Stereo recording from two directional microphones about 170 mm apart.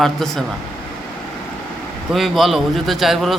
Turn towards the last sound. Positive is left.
turn(degrees=0)  # may be behind; listen again after turning